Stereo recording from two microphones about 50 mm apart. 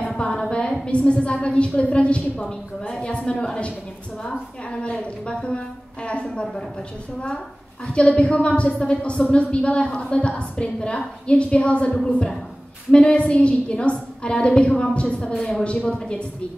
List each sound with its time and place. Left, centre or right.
0.2 s a sound: left
0.8 s a woman's voice: left
7.8 s a woman's voice: left
12.9 s a woman's voice: left